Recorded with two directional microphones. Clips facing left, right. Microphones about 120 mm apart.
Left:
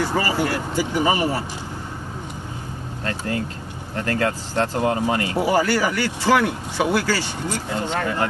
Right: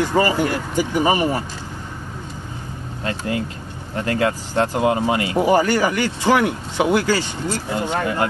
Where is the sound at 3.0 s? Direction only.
15° right (ahead or behind).